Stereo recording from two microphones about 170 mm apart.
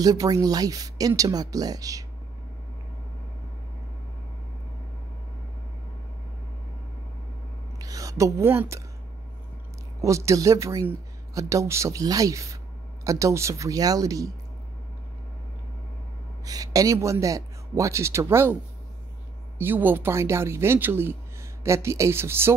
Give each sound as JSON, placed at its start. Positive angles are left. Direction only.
{"t": 0.0, "sound": "speech", "side_deg": -20}
{"t": 7.8, "sound": "speech", "side_deg": -20}
{"t": 10.0, "sound": "speech", "side_deg": -20}
{"t": 16.4, "sound": "speech", "side_deg": -20}
{"t": 19.6, "sound": "speech", "side_deg": -10}